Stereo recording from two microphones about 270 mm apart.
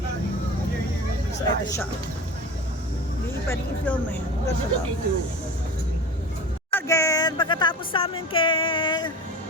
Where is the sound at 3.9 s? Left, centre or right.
Centre.